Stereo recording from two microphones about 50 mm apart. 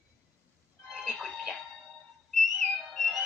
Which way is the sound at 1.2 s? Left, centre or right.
Centre.